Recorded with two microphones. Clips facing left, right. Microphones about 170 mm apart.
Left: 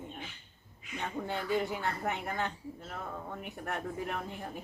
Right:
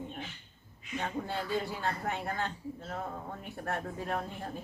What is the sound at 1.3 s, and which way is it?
Speech, 20° left (ahead or behind).